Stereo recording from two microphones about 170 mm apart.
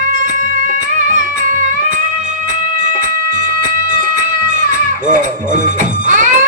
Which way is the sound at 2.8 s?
50° right (ahead or behind).